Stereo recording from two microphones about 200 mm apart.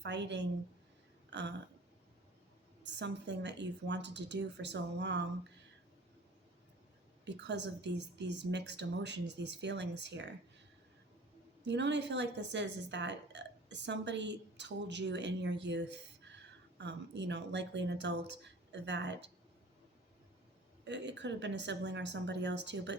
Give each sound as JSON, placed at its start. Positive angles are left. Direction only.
{"t": 0.0, "sound": "speech", "side_deg": -60}
{"t": 1.3, "sound": "a sound", "side_deg": -60}
{"t": 2.8, "sound": "speech", "side_deg": -60}
{"t": 7.3, "sound": "speech", "side_deg": -60}
{"t": 11.6, "sound": "a woman's voice", "side_deg": -60}
{"t": 20.8, "sound": "speech", "side_deg": -60}